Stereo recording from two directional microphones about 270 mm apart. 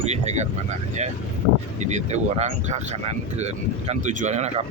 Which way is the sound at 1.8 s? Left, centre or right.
Right.